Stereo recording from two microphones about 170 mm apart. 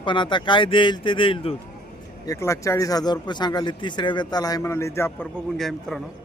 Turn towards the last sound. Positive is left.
turn(degrees=0)  # may be behind; listen again after turning